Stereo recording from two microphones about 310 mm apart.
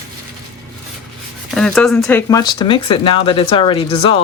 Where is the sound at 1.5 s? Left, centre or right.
Centre.